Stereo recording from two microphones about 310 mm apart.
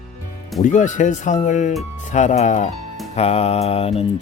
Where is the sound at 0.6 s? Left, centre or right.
Left.